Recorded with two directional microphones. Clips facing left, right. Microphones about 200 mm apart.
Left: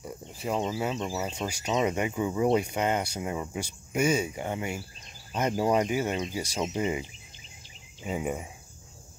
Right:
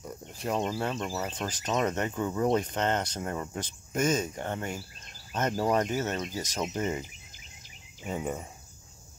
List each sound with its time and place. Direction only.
0.0 s speech: 5° left (ahead or behind)